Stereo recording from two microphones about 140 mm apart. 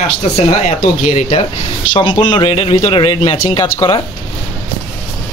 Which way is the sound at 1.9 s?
35° left (ahead or behind).